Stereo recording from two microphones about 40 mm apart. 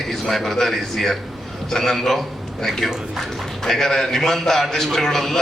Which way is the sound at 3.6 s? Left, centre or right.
Centre.